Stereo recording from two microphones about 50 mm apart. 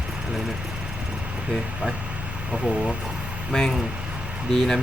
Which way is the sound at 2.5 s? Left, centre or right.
Centre.